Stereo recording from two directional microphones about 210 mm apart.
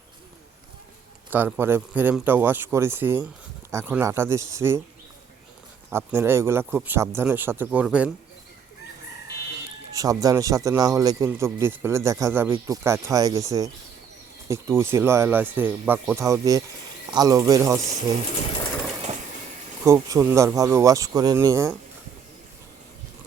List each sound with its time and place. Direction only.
1.3 s a man's voice: 10° right (ahead or behind)
5.9 s a man's voice: 10° right (ahead or behind)
9.9 s a man's voice: 15° right (ahead or behind)
19.8 s a man's voice: 15° right (ahead or behind)